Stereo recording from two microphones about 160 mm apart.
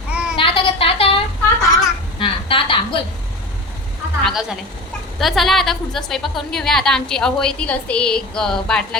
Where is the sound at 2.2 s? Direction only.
35° left (ahead or behind).